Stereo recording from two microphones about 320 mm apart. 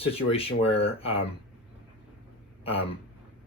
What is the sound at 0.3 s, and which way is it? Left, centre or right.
Speech, centre.